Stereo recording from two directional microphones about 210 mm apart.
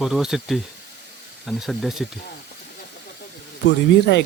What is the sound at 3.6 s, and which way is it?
Speech, 55° left (ahead or behind).